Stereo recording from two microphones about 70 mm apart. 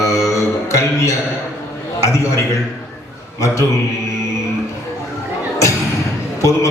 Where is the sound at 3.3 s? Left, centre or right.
Left.